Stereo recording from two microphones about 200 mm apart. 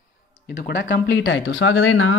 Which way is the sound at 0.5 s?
55° left (ahead or behind).